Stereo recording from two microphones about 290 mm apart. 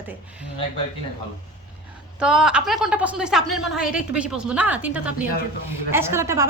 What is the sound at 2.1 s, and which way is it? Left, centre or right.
A woman's voice, centre.